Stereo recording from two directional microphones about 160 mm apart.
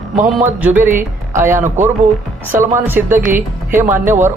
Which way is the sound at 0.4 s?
10° right (ahead or behind).